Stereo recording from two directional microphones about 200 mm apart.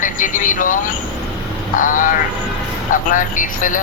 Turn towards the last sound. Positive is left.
turn(degrees=40)  # may be behind; listen again after turning